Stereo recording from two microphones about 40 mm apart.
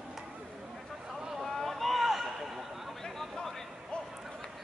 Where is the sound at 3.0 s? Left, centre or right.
Centre.